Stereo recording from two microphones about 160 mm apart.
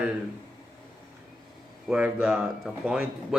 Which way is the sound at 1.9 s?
10° right (ahead or behind).